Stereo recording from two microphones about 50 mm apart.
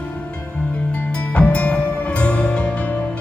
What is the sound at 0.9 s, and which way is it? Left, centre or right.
Music, left.